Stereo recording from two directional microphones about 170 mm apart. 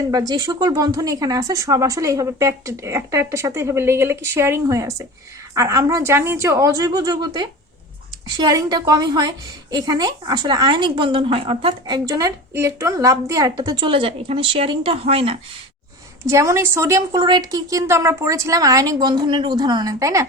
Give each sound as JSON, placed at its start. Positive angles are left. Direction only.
{"t": 0.0, "sound": "a woman's voice", "side_deg": -20}
{"t": 16.2, "sound": "a woman's voice", "side_deg": -20}